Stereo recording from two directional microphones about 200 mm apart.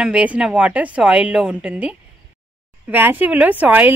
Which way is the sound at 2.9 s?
10° right (ahead or behind).